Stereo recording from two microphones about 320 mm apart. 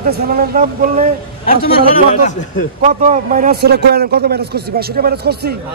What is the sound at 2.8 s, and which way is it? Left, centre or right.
A man's voice, right.